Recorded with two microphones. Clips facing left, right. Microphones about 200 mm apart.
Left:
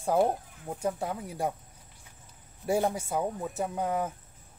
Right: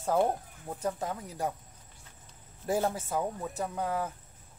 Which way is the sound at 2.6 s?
15° left (ahead or behind).